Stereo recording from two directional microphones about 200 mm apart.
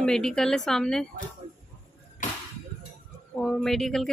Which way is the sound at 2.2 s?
40° left (ahead or behind).